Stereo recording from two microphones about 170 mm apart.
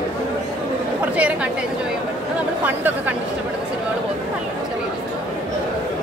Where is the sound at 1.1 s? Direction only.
10° right (ahead or behind).